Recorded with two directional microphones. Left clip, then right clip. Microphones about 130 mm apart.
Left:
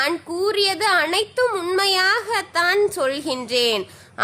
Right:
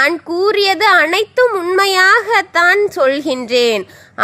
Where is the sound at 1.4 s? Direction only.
30° right (ahead or behind).